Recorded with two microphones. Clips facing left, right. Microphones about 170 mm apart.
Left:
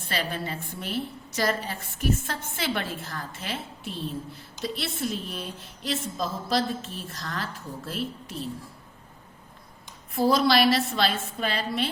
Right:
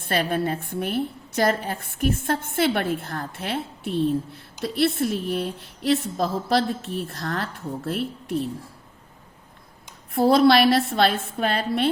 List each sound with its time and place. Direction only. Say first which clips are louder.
0.0 s a woman's voice: right 7 dB; 55° right (ahead or behind)
10.2 s a woman's voice: right 5 dB; 60° right (ahead or behind)